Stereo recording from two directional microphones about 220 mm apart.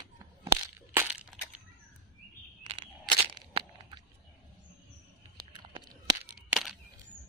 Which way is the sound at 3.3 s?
20° right (ahead or behind).